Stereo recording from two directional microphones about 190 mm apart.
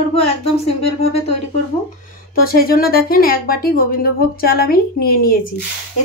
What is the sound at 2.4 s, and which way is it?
Speech, 50° left (ahead or behind).